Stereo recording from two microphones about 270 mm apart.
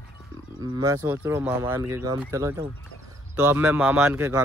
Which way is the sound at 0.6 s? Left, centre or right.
Centre.